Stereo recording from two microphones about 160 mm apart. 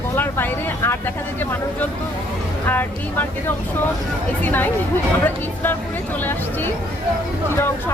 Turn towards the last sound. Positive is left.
turn(degrees=15)  # may be behind; listen again after turning